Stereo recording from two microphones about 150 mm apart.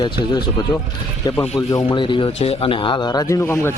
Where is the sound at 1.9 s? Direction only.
35° left (ahead or behind).